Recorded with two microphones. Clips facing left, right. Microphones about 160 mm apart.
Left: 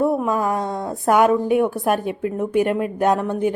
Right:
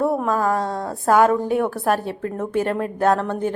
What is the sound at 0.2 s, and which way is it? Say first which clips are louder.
A woman's voice: even; 15° left (ahead or behind).